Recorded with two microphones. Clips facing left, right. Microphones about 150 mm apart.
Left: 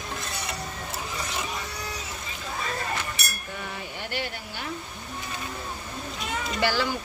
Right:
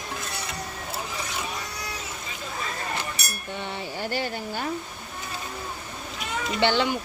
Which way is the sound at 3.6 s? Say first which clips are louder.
Right 5 dB; 35° right (ahead or behind).